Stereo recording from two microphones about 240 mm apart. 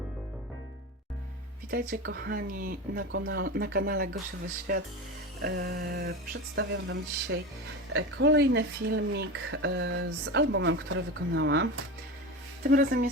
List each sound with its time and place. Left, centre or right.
1.7 s speech: right
12.6 s speech: right